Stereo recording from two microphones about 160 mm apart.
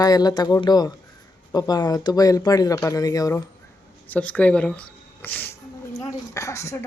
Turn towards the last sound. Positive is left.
turn(degrees=20)  # may be behind; listen again after turning